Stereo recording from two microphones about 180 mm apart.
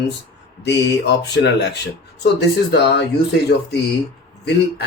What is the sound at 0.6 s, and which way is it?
Speech, 70° left (ahead or behind).